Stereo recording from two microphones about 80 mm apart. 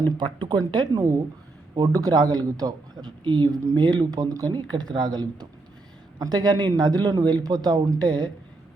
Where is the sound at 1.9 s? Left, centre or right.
Right.